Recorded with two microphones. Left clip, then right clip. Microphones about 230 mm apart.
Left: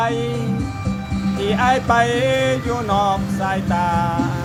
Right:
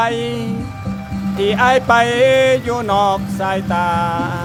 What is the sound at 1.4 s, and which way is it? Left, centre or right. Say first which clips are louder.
Music: right 4 dB; right.